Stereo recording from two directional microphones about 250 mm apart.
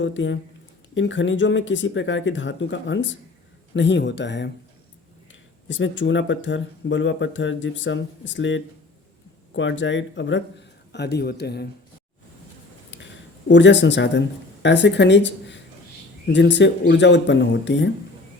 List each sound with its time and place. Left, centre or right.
0.0 s speech: left
5.6 s speech: left
13.5 s speech: left